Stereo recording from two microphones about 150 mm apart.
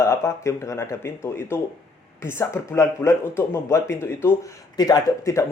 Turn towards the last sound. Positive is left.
turn(degrees=25)  # may be behind; listen again after turning